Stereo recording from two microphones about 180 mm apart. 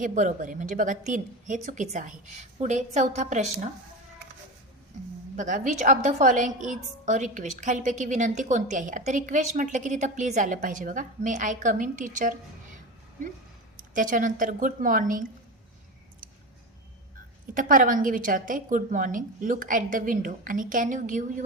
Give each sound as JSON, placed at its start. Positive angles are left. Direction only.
{"t": 0.0, "sound": "a woman's voice", "side_deg": -45}
{"t": 5.4, "sound": "a woman's voice", "side_deg": -45}
{"t": 13.7, "sound": "a woman's voice", "side_deg": -45}
{"t": 17.5, "sound": "a woman's voice", "side_deg": -50}